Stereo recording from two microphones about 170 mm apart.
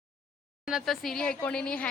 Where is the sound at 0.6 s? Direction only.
Centre (ahead or behind).